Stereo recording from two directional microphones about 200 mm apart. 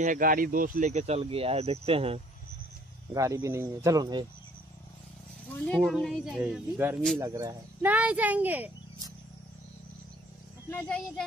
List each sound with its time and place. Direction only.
0.0 s speech: 40° right (ahead or behind)
3.1 s speech: 15° right (ahead or behind)
5.7 s a woman's voice: centre (ahead or behind)
10.7 s speech: 10° left (ahead or behind)